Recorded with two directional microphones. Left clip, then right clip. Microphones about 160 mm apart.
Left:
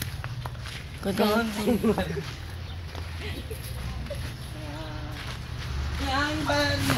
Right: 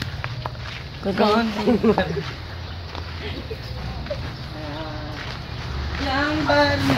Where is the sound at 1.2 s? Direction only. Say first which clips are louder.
Right 6 dB; 35° left (ahead or behind).